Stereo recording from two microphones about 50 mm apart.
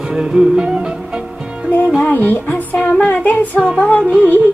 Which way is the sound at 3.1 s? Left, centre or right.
Left.